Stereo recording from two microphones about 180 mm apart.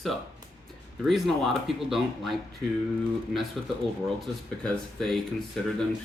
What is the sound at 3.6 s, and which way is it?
Speech, centre (ahead or behind).